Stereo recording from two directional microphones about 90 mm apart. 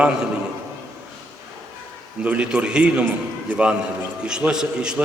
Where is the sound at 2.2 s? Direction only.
10° right (ahead or behind).